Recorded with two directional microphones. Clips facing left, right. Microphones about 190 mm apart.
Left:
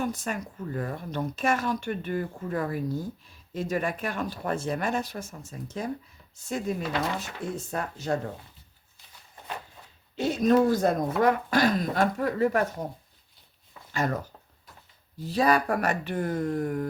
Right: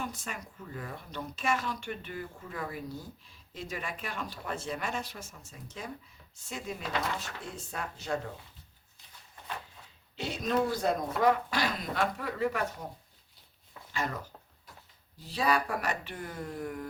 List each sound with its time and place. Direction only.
0.0 s speech: 50° left (ahead or behind)
10.2 s speech: 45° left (ahead or behind)
13.9 s speech: 45° left (ahead or behind)
15.2 s speech: 45° left (ahead or behind)